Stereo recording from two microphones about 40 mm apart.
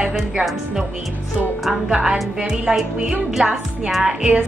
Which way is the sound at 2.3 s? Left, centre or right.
Centre.